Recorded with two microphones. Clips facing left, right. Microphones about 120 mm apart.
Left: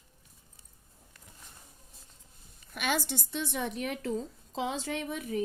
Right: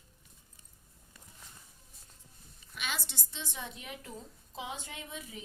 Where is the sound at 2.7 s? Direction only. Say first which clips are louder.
Left 9 dB; 55° left (ahead or behind).